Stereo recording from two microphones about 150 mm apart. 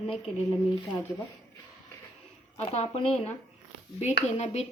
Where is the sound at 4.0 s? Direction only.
45° left (ahead or behind).